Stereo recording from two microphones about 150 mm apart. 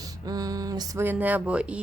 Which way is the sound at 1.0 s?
10° right (ahead or behind).